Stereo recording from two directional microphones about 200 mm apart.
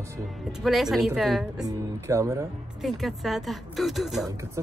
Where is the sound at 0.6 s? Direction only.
Centre (ahead or behind).